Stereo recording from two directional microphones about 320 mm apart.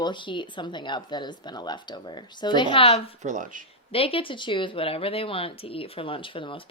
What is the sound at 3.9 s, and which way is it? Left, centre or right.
Speech, centre.